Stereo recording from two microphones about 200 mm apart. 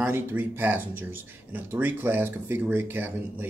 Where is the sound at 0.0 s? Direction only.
10° right (ahead or behind).